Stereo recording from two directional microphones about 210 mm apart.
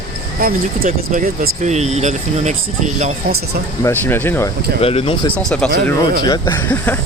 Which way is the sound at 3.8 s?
10° left (ahead or behind).